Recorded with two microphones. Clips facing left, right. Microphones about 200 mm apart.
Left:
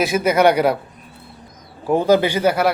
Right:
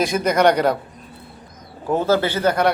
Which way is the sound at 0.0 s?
5° left (ahead or behind).